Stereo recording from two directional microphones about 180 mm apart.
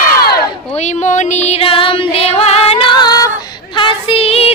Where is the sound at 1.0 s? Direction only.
40° left (ahead or behind).